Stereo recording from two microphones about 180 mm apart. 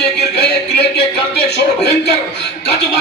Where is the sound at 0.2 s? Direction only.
65° left (ahead or behind).